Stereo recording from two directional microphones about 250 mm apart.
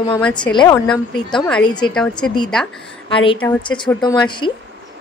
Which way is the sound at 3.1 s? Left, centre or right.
Left.